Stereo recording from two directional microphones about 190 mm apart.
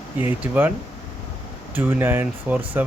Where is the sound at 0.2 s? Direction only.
10° right (ahead or behind).